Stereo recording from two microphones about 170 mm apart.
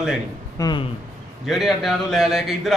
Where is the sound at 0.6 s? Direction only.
20° left (ahead or behind).